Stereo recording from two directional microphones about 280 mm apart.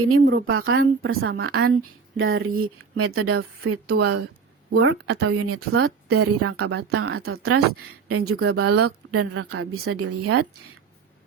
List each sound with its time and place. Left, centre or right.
0.1 s speech: right